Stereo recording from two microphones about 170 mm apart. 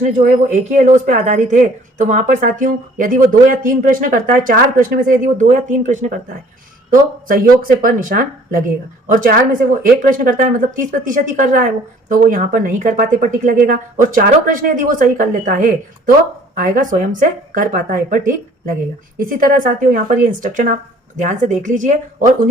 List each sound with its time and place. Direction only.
0.0 s speech: 45° right (ahead or behind)